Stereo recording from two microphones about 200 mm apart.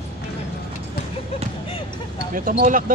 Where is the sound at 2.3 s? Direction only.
45° right (ahead or behind).